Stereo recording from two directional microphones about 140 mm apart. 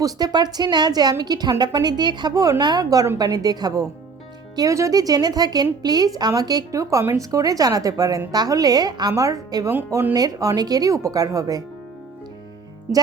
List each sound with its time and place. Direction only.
0.0 s speech: 30° right (ahead or behind)
9.7 s speech: 15° right (ahead or behind)
10.2 s speech: 25° right (ahead or behind)